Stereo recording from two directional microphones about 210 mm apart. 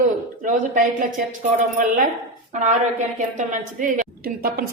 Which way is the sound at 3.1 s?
35° right (ahead or behind).